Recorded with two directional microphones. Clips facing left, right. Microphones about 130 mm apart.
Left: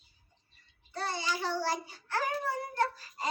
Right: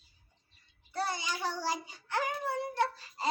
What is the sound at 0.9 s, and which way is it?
Child singing, 10° right (ahead or behind).